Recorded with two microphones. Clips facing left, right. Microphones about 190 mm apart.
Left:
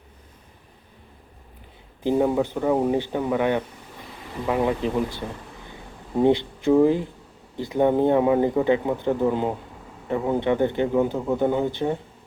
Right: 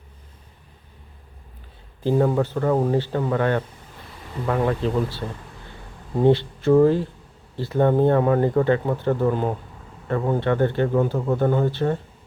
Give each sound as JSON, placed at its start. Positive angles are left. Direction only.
{"t": 2.0, "sound": "speech", "side_deg": 15}